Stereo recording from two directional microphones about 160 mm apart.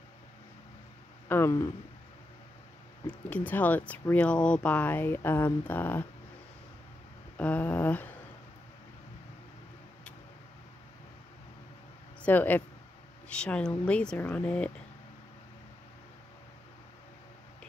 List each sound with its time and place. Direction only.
1.3 s speech: 20° left (ahead or behind)
3.1 s speech: 10° left (ahead or behind)
7.3 s a sound: 10° left (ahead or behind)
12.2 s speech: 10° left (ahead or behind)